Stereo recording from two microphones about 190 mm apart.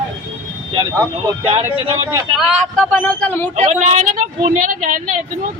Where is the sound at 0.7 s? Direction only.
20° right (ahead or behind).